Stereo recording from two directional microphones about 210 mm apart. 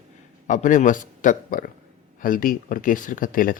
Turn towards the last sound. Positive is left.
turn(degrees=40)  # may be behind; listen again after turning